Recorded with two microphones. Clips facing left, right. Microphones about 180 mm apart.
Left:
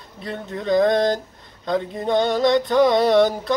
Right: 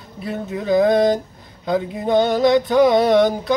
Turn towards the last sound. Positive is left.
turn(degrees=0)  # may be behind; listen again after turning